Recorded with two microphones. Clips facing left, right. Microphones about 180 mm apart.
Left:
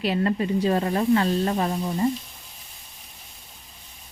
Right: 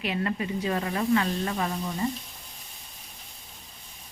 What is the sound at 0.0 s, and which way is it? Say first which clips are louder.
Speech: left 6 dB; 35° left (ahead or behind).